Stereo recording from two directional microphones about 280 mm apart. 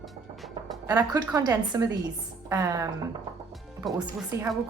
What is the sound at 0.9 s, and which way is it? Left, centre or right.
A woman's voice, centre.